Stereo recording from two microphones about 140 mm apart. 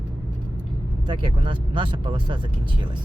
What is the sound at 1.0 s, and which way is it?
Speech, 35° right (ahead or behind).